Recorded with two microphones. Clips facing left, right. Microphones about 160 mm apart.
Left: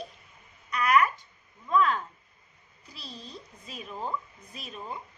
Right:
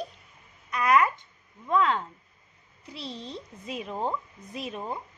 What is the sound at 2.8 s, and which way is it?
Speech, 60° right (ahead or behind).